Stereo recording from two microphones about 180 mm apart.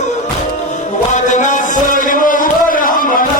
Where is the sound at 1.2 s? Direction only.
45° left (ahead or behind).